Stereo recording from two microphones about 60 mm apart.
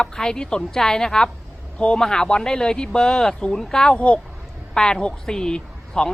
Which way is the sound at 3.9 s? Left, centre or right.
Left.